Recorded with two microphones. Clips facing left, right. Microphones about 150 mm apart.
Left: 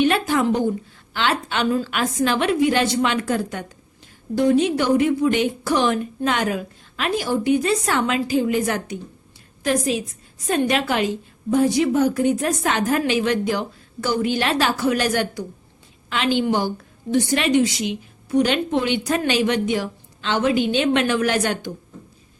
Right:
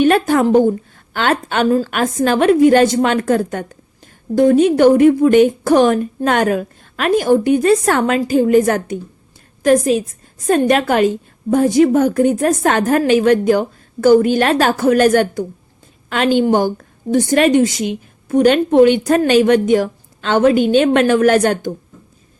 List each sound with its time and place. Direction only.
0.0 s a woman's voice: 45° right (ahead or behind)